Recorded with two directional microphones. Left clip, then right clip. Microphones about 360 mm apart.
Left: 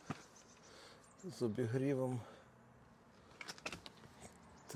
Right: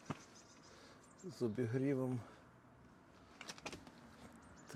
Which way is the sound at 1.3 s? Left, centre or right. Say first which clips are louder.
Left 1 dB; centre.